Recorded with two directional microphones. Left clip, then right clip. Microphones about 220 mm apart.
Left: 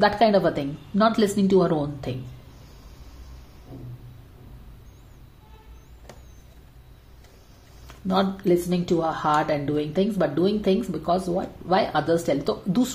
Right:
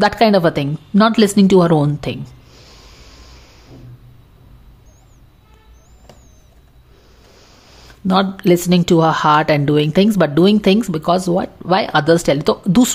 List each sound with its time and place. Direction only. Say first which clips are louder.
0.0 s speech: right 6 dB; 35° right (ahead or behind)
8.1 s speech: right 7 dB; 35° right (ahead or behind)